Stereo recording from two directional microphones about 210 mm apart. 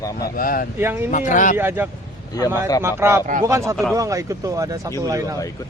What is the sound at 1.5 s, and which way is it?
Speech, 10° right (ahead or behind).